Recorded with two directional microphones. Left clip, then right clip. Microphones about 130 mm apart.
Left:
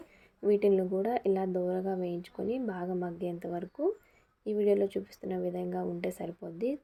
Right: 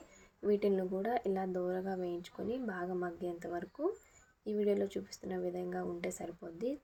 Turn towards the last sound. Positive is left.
turn(degrees=25)  # may be behind; listen again after turning